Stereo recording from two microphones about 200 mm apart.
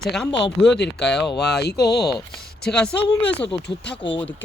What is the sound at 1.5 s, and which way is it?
Speech, 55° left (ahead or behind).